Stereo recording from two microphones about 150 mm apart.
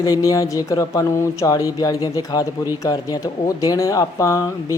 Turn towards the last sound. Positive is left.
turn(degrees=20)  # may be behind; listen again after turning